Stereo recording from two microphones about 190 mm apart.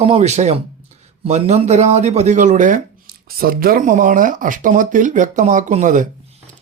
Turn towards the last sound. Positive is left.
turn(degrees=-40)  # may be behind; listen again after turning